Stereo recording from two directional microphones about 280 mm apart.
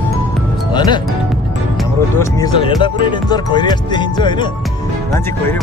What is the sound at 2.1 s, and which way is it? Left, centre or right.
Speech, centre.